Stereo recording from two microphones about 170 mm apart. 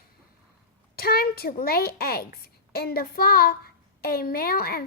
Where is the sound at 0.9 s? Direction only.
60° left (ahead or behind).